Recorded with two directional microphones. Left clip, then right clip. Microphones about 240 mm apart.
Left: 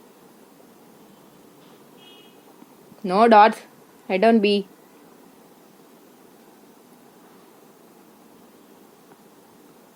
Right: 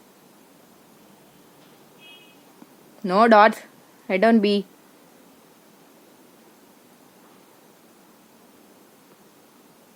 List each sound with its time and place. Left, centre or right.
3.0 s speech: right